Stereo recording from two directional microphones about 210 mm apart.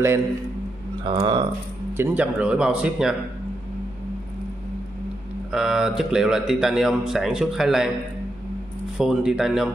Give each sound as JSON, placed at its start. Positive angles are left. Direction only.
{"t": 1.0, "sound": "speech", "side_deg": -20}
{"t": 2.0, "sound": "speech", "side_deg": -5}
{"t": 5.5, "sound": "speech", "side_deg": 0}
{"t": 8.9, "sound": "speech", "side_deg": 0}